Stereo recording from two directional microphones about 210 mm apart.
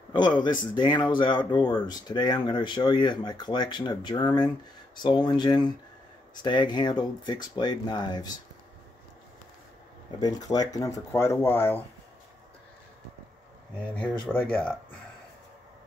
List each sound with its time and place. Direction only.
0.1 s speech: 20° left (ahead or behind)
10.2 s speech: 20° left (ahead or behind)
13.9 s speech: 5° left (ahead or behind)